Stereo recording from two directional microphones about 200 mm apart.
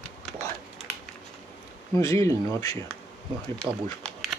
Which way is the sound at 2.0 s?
15° left (ahead or behind).